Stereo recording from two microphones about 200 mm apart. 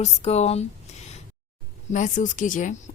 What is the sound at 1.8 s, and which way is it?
Speech, 40° left (ahead or behind).